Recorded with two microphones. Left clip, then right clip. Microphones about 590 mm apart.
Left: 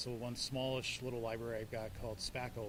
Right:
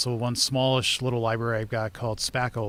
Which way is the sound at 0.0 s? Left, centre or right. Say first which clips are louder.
Right 16 dB; right.